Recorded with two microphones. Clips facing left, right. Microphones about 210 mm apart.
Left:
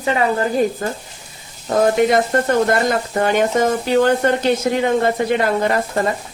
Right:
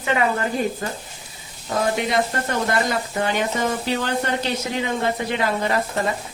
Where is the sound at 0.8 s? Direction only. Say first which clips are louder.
Left 5 dB; 45° left (ahead or behind).